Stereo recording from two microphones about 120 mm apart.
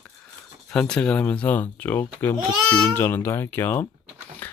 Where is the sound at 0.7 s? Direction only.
5° left (ahead or behind).